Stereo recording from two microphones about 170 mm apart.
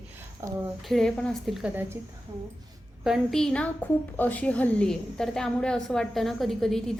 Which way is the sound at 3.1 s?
Centre (ahead or behind).